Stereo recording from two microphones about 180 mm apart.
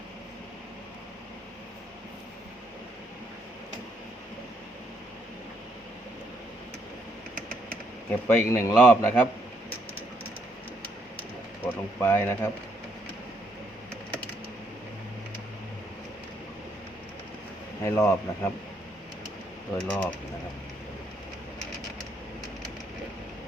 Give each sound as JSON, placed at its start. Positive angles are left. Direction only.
{"t": 8.3, "sound": "a man's voice", "side_deg": 15}
{"t": 11.6, "sound": "speech", "side_deg": 10}
{"t": 17.8, "sound": "a man's voice", "side_deg": 15}
{"t": 19.7, "sound": "a man's voice", "side_deg": 5}